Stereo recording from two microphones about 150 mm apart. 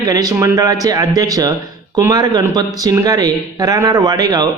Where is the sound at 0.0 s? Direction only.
25° right (ahead or behind).